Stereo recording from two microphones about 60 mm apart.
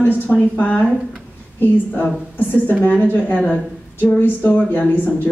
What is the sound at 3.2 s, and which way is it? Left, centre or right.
Speech, left.